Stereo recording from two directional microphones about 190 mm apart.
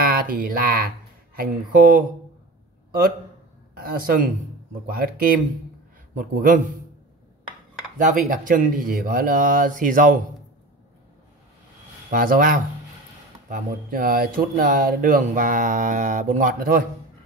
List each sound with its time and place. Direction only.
0.0 s speech: 50° right (ahead or behind)
3.9 s speech: 50° right (ahead or behind)
8.3 s speech: 45° right (ahead or behind)
12.1 s speech: 45° right (ahead or behind)